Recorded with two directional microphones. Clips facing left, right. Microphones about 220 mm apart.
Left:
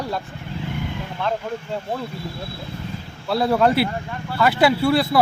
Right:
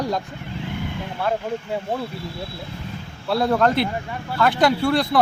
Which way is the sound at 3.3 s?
5° left (ahead or behind).